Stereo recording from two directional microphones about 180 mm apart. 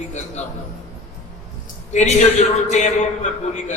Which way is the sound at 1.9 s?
40° left (ahead or behind).